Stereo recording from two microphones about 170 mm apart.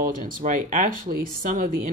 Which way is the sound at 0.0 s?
50° right (ahead or behind).